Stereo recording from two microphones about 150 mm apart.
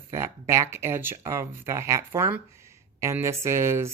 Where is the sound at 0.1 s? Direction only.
20° right (ahead or behind).